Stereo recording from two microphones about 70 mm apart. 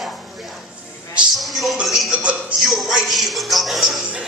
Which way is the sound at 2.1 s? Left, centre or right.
Centre.